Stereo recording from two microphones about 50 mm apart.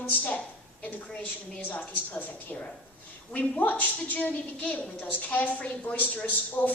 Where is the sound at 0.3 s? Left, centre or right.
Left.